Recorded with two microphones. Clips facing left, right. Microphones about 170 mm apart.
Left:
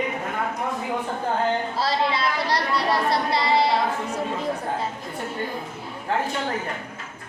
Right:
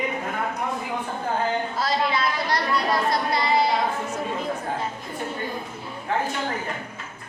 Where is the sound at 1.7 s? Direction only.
30° left (ahead or behind).